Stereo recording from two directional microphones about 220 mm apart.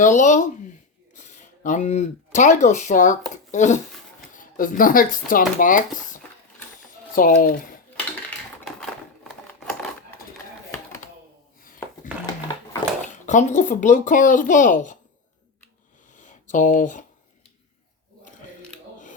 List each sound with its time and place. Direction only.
0.0 s speech: 35° left (ahead or behind)
7.2 s speech: 40° left (ahead or behind)
8.6 s typewriter: centre (ahead or behind)
13.2 s speech: 35° left (ahead or behind)
16.1 s a sound: 35° left (ahead or behind)